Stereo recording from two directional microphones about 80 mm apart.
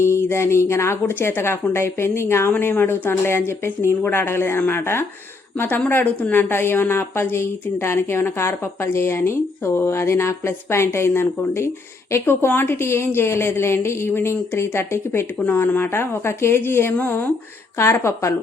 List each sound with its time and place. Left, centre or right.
0.0 s a woman's voice: left